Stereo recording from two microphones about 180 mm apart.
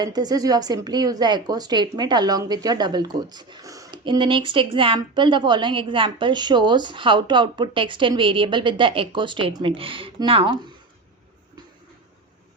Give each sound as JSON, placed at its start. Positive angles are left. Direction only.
{"t": 0.0, "sound": "a woman's voice", "side_deg": -20}